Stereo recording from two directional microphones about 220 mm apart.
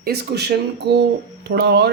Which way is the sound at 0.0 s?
45° right (ahead or behind).